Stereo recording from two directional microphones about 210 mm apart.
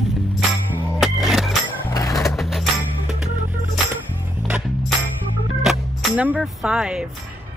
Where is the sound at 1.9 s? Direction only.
15° left (ahead or behind).